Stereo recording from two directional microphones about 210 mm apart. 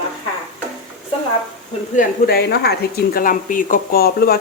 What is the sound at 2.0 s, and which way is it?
Speech, 50° left (ahead or behind).